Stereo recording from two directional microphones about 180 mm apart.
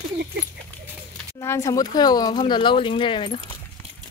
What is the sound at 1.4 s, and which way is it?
Speech, 20° left (ahead or behind).